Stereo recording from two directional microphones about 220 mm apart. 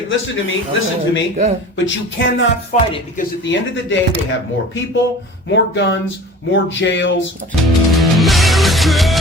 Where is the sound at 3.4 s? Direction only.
60° left (ahead or behind).